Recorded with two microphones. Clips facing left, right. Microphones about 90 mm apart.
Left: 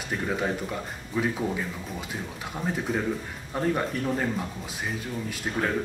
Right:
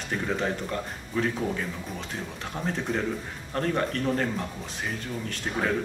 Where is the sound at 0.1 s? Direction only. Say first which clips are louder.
Even; 5° left (ahead or behind).